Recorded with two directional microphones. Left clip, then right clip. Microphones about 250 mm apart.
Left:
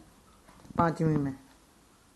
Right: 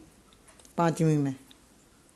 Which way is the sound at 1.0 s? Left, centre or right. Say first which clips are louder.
Right 3 dB; right.